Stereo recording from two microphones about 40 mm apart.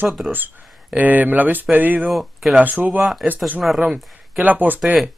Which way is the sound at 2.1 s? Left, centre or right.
Centre.